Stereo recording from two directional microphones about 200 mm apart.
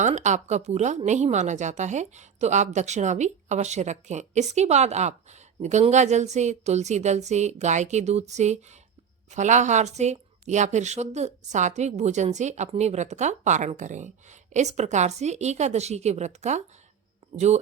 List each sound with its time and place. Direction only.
0.0 s a woman's voice: 35° right (ahead or behind)